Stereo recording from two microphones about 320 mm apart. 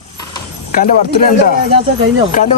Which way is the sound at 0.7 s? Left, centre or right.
Left.